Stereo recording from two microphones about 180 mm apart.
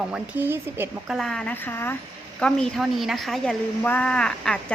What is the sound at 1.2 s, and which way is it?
A woman's voice, 5° left (ahead or behind).